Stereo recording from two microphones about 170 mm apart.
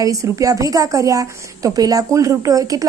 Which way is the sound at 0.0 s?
20° right (ahead or behind).